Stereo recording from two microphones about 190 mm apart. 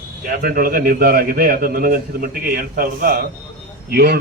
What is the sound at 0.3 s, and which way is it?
A man's voice, 50° right (ahead or behind).